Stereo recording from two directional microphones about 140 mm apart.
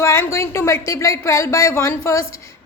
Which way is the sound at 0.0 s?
20° left (ahead or behind).